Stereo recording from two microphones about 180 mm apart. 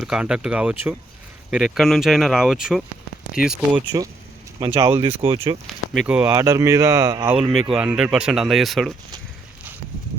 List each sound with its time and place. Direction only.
0.0 s speech: 5° right (ahead or behind)
4.8 s speech: 20° right (ahead or behind)
5.2 s speech: 30° right (ahead or behind)
5.6 s speech: centre (ahead or behind); by 7.3 s 15° right (ahead or behind)
7.3 s speech: 5° right (ahead or behind)